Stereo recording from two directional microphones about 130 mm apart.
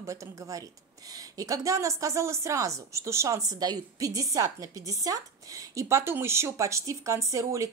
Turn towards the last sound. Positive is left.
turn(degrees=-25)  # may be behind; listen again after turning